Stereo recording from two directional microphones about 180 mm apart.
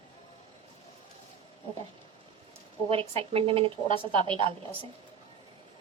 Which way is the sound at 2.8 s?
30° right (ahead or behind).